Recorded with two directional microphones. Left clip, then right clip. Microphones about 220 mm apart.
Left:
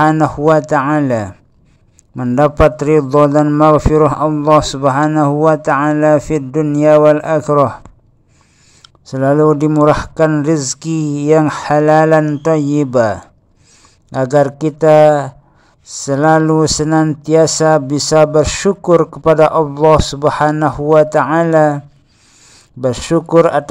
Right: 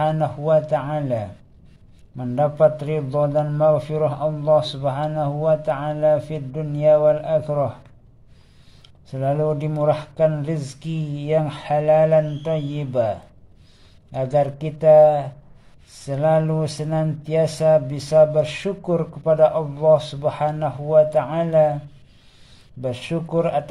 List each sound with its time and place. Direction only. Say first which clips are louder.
0.0 s speech: left 10 dB; 35° left (ahead or behind)
8.8 s speech: left 10 dB; 30° left (ahead or behind)
14.2 s speech: left 8 dB; 30° left (ahead or behind)
22.8 s speech: left 12 dB; 35° left (ahead or behind)